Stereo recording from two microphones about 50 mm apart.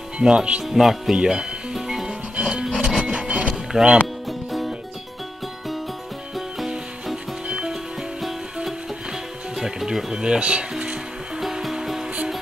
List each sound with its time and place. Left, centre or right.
0.2 s speech: centre
0.7 s speech: centre
1.1 s music: centre
2.6 s music: centre
4.3 s music: centre
7.4 s music: centre
11.3 s music: centre